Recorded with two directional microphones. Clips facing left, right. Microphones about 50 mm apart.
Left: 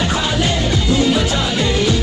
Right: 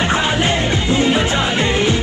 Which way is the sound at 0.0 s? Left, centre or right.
Right.